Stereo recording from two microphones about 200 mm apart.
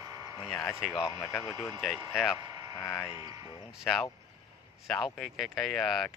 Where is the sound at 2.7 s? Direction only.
15° left (ahead or behind).